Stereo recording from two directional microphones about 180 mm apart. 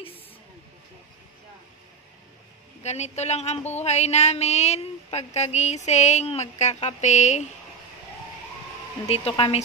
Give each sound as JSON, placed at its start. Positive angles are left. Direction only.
{"t": 2.8, "sound": "speech", "side_deg": 40}
{"t": 9.0, "sound": "speech", "side_deg": 35}